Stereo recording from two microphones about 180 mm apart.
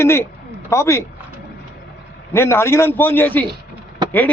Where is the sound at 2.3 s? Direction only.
15° left (ahead or behind).